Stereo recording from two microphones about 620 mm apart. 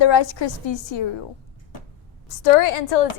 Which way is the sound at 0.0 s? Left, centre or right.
Left.